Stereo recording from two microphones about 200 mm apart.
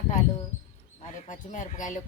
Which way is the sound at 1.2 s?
40° left (ahead or behind).